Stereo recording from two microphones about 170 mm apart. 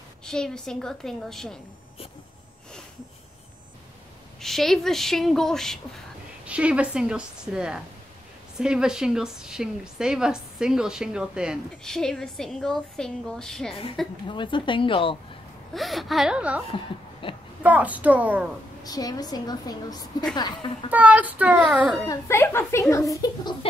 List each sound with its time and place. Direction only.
0.2 s a woman's voice: 5° left (ahead or behind)
4.4 s a woman's voice: centre (ahead or behind)
14.2 s a woman's voice: 30° left (ahead or behind)
15.7 s a woman's voice: centre (ahead or behind)
16.7 s a woman's voice: 30° left (ahead or behind)
17.6 s a child's voice: 10° right (ahead or behind)
18.9 s a woman's voice: 20° left (ahead or behind)
20.9 s a child's voice: 10° right (ahead or behind)
22.0 s speech: 15° left (ahead or behind)